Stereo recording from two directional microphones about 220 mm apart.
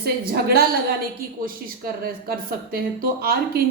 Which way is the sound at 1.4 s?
40° right (ahead or behind).